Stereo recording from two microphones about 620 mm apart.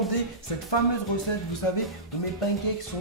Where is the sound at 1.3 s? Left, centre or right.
Left.